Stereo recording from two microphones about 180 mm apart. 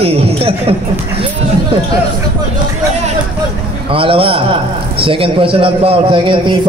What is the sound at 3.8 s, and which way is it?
A man's voice, 30° right (ahead or behind).